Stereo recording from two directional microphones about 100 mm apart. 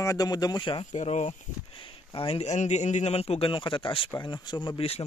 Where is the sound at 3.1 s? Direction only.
90° left.